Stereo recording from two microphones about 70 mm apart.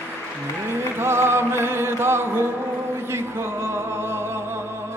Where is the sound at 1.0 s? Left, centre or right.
Right.